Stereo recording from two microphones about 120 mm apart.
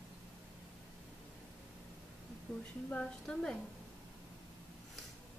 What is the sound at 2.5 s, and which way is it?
A woman's voice, 5° left (ahead or behind).